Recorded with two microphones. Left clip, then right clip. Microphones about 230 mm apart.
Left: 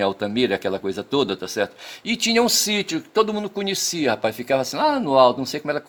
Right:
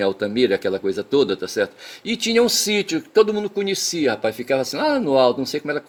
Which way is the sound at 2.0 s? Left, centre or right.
Left.